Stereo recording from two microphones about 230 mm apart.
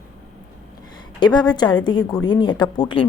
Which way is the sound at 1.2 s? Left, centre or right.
Centre.